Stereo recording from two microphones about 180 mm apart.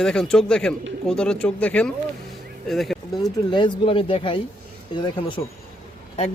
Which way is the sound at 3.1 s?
25° left (ahead or behind).